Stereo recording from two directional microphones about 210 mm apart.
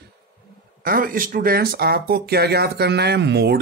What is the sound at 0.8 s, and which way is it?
Speech, 40° right (ahead or behind).